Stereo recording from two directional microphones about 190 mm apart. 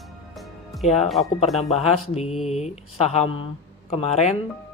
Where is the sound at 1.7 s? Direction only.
35° left (ahead or behind).